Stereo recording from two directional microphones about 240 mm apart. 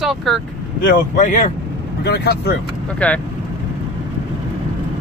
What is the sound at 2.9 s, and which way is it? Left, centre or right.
Speech, centre.